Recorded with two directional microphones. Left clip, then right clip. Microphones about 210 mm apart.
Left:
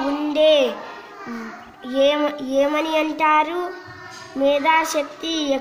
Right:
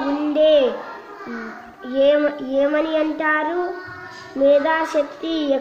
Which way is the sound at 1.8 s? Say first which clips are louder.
Right 2 dB; 45° left (ahead or behind).